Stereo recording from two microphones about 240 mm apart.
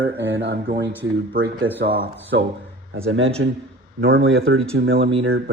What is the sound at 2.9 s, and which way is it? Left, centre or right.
Speech, right.